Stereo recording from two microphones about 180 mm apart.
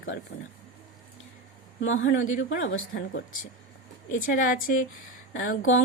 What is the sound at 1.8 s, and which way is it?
Speech, 90° left.